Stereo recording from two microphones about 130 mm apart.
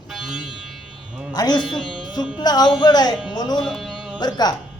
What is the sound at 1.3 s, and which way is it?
Speech, 35° left (ahead or behind).